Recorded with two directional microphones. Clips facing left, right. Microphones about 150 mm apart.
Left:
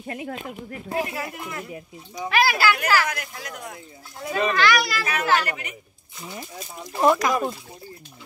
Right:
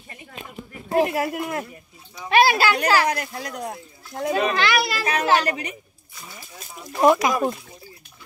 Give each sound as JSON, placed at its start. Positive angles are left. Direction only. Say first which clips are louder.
{"t": 0.0, "sound": "speech", "louder": "left 9 dB", "side_deg": 65}
{"t": 0.9, "sound": "speech", "louder": "right 8 dB", "side_deg": -55}
{"t": 2.2, "sound": "speech", "louder": "right 3 dB", "side_deg": -30}
{"t": 4.3, "sound": "a child's voice", "louder": "even", "side_deg": -20}
{"t": 7.0, "sound": "speech", "louder": "right 2 dB", "side_deg": -10}